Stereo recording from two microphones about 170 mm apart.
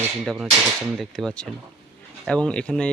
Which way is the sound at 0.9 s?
5° left (ahead or behind).